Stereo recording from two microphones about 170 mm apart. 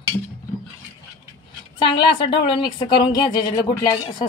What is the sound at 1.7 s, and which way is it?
A woman's voice, 30° left (ahead or behind).